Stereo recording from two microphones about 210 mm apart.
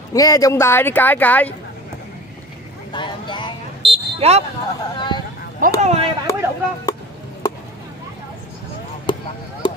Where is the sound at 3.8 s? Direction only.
25° right (ahead or behind).